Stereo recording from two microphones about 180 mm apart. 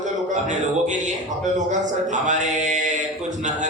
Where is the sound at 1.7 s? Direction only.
40° right (ahead or behind).